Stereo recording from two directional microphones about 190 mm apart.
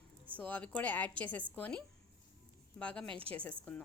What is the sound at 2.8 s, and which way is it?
Speech, 5° left (ahead or behind).